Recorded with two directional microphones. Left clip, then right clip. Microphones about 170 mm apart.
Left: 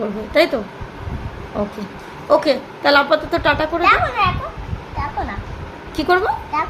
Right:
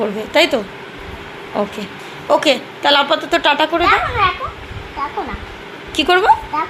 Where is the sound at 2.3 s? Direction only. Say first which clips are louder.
Right 1 dB; 5° right (ahead or behind).